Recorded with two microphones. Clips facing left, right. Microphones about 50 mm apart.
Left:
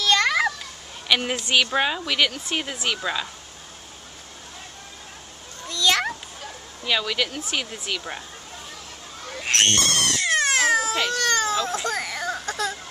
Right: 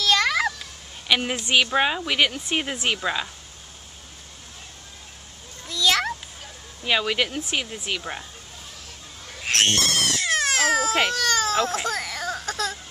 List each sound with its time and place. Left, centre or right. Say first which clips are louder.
0.0 s children playing: left 1 dB; centre
1.0 s a sound: even; centre
1.5 s speech: right 1 dB; centre
3.0 s speech: right 1 dB; centre
5.7 s cat: even; centre
6.8 s speech: right 2 dB; right
9.4 s a sound: even; centre
11.1 s baby cry: left 1 dB; centre
11.6 s a sound: right 1 dB; centre